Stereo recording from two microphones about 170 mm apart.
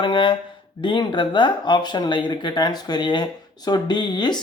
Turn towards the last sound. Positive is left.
turn(degrees=25)  # may be behind; listen again after turning